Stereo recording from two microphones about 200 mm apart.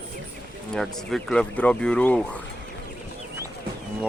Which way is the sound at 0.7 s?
Centre (ahead or behind).